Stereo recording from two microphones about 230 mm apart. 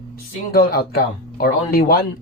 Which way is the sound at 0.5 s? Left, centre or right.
Left.